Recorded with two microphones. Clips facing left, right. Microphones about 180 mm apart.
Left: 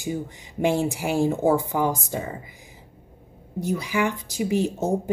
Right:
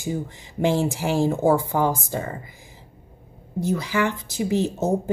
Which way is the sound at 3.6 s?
15° left (ahead or behind).